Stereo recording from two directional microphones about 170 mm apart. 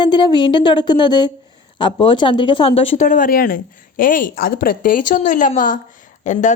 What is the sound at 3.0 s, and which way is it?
A woman's voice, 55° left (ahead or behind).